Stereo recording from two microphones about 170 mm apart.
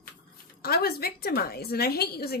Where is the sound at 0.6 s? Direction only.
65° left (ahead or behind).